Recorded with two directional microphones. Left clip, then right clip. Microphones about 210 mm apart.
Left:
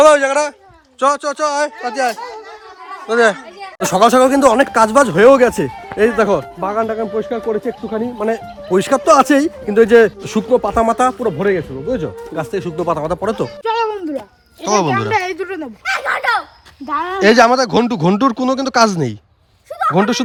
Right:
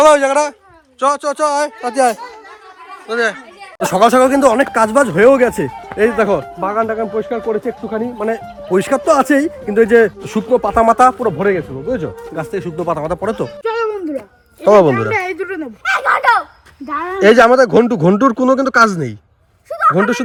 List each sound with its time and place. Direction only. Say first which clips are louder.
0.0 s speech: even; 5° left (ahead or behind)
3.1 s speech: left 4 dB; 20° left (ahead or behind)
3.9 s speech: even; centre (ahead or behind)
5.4 s speech: left 1 dB; centre (ahead or behind)
16.9 s speech: right 2 dB; 5° left (ahead or behind)